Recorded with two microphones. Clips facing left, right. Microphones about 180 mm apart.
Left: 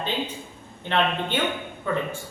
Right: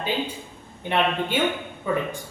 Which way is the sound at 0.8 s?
10° right (ahead or behind).